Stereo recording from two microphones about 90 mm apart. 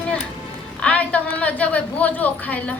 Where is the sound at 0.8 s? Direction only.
15° left (ahead or behind).